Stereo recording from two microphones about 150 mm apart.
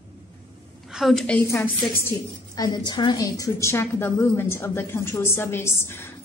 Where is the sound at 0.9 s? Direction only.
Centre (ahead or behind).